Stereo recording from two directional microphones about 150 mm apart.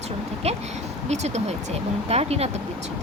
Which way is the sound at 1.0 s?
50° right (ahead or behind).